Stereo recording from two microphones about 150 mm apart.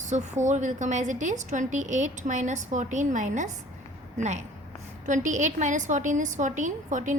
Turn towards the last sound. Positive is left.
turn(degrees=-55)  # may be behind; listen again after turning